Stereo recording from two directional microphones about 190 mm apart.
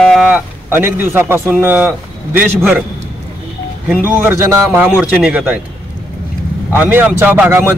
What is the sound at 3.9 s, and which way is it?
Speech, 10° right (ahead or behind).